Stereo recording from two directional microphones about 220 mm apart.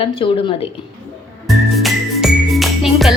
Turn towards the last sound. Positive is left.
turn(degrees=0)  # may be behind; listen again after turning